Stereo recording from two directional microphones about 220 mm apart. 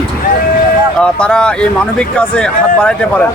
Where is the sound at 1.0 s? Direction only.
5° left (ahead or behind).